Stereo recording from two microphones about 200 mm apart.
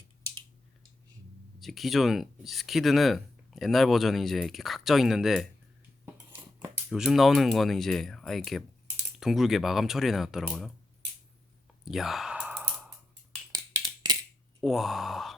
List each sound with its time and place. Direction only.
1.5 s speech: centre (ahead or behind)
6.9 s speech: centre (ahead or behind)
11.9 s sigh: centre (ahead or behind)
13.5 s a sound: 20° right (ahead or behind)
14.6 s speech: centre (ahead or behind)